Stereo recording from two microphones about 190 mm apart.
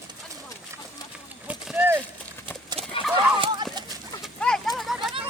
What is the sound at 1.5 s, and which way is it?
Clip-clop, 10° right (ahead or behind).